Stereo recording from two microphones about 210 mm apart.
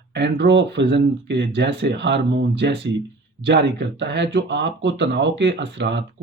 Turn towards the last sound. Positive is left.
turn(degrees=-55)  # may be behind; listen again after turning